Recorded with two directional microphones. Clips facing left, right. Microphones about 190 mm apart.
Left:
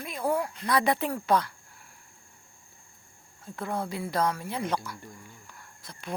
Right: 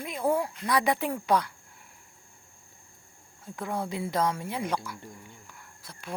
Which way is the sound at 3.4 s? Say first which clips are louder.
Even; 15° right (ahead or behind).